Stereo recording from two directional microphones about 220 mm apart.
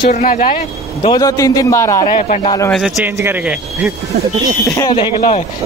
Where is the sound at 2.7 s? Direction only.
Centre (ahead or behind).